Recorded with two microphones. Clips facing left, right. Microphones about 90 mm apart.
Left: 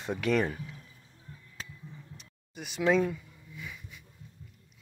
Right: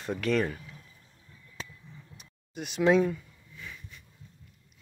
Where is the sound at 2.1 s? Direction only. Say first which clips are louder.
Right 9 dB; centre (ahead or behind).